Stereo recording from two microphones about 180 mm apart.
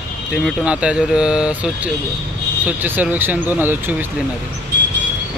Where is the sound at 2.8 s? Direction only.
10° right (ahead or behind).